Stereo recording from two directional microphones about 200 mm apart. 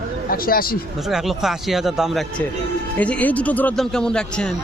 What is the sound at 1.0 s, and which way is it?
A man's voice, centre (ahead or behind).